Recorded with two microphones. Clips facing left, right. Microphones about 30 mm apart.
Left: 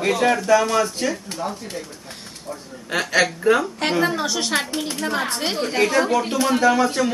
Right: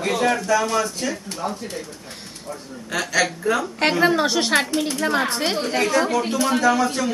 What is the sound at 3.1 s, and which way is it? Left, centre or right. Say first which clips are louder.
Speech: left 4 dB; left.